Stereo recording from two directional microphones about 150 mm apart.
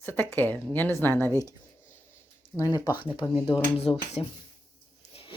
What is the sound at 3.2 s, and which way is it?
Speech, 25° left (ahead or behind).